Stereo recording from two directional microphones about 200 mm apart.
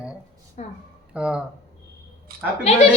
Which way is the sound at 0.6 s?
35° left (ahead or behind).